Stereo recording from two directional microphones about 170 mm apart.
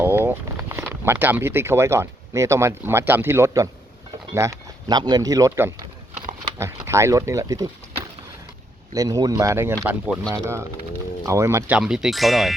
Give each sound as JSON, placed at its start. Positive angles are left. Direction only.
{"t": 0.0, "sound": "a sound", "side_deg": -15}
{"t": 0.7, "sound": "speech", "side_deg": -15}
{"t": 11.3, "sound": "speech", "side_deg": -15}
{"t": 11.8, "sound": "speech", "side_deg": -5}